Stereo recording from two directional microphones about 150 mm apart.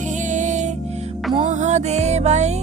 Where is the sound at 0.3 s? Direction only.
55° right (ahead or behind).